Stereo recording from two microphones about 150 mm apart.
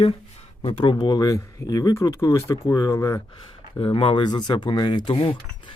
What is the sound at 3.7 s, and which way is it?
Speech, 35° left (ahead or behind).